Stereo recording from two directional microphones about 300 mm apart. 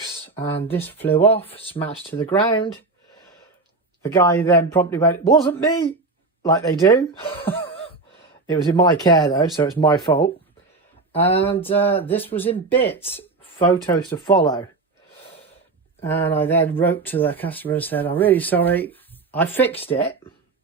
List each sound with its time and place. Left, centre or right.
0.7 s speech: centre
1.5 s speech: centre
4.0 s speech: centre
6.6 s a sound: centre
8.4 s speech: centre
11.4 s speech: centre
16.0 s speech: centre
19.7 s speech: centre